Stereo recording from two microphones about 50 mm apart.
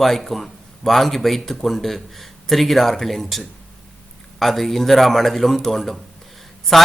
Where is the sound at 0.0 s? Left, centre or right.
Centre.